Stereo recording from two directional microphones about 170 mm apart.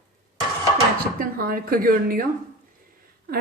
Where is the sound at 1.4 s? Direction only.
60° right (ahead or behind).